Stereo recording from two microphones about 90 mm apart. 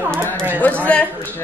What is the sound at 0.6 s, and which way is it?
Speech, 20° left (ahead or behind).